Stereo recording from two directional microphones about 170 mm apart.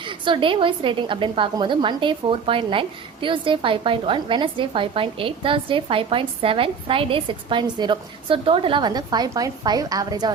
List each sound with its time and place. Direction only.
0.0 s a woman's voice: 30° right (ahead or behind)